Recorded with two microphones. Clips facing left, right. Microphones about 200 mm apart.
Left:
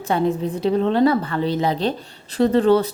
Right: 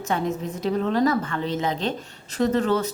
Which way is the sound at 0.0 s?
30° left (ahead or behind).